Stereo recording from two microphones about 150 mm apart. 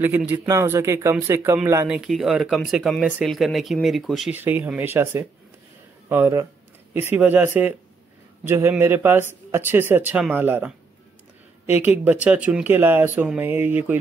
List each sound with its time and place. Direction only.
0.0 s speech: 10° right (ahead or behind)
1.9 s speech: 5° right (ahead or behind)
4.4 s speech: 15° right (ahead or behind)
11.7 s speech: 10° right (ahead or behind)